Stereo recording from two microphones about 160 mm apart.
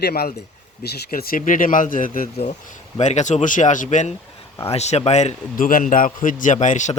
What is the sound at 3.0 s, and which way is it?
A man's voice, 45° left (ahead or behind).